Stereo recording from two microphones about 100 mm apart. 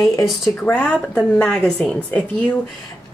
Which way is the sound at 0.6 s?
15° left (ahead or behind).